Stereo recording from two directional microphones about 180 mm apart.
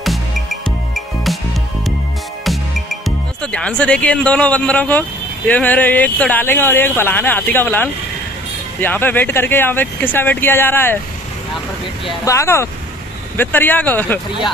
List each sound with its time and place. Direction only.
0.0 s music: centre (ahead or behind)
2.4 s music: centre (ahead or behind)
3.5 s speech: 5° left (ahead or behind)
12.3 s speech: 15° left (ahead or behind)